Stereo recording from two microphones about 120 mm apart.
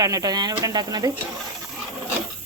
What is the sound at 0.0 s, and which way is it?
Speech, 30° right (ahead or behind).